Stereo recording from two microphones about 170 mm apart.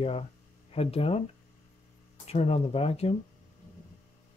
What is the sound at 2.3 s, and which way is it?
Speech, 40° left (ahead or behind).